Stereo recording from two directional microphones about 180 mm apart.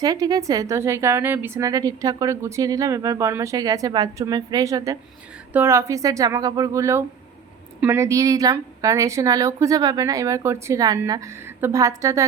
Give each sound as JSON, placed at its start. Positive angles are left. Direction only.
{"t": 0.0, "sound": "a woman's voice", "side_deg": -20}